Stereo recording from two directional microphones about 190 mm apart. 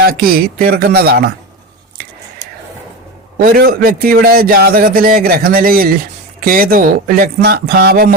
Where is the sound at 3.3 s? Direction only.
50° right (ahead or behind).